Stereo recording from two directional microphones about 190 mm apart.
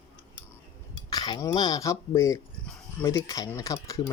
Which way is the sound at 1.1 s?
20° left (ahead or behind).